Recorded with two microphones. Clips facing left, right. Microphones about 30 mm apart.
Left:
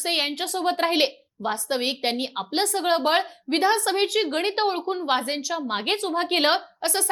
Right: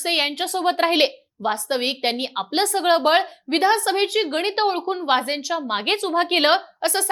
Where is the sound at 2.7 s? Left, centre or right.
Right.